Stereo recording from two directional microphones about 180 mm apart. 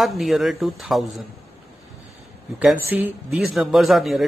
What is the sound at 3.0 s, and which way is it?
A man's voice, 5° right (ahead or behind).